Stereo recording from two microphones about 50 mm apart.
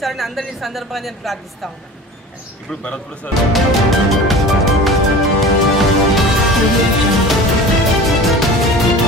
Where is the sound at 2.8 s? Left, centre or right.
Left.